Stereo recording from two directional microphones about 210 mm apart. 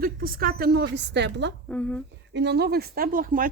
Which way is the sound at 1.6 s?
5° left (ahead or behind).